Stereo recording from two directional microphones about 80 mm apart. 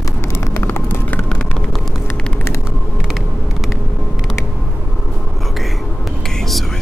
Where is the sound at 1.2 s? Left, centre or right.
Centre.